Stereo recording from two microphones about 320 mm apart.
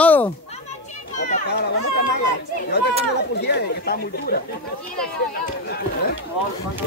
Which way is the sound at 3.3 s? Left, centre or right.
Left.